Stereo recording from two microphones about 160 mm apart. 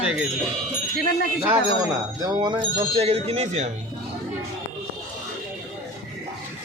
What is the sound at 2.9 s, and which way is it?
Speech, 40° right (ahead or behind).